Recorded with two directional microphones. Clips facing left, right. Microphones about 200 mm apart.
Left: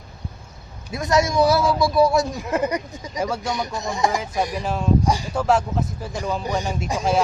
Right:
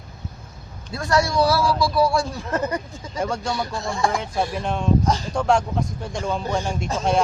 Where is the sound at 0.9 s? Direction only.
20° left (ahead or behind).